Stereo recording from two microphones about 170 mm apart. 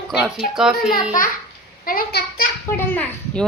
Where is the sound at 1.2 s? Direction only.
55° left (ahead or behind).